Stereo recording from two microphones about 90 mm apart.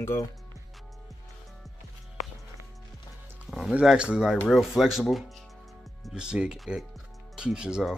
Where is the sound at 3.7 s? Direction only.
10° right (ahead or behind).